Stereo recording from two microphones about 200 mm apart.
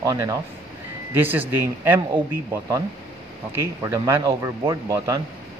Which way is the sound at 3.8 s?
15° right (ahead or behind).